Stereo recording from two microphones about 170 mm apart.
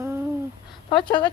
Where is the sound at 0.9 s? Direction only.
30° left (ahead or behind).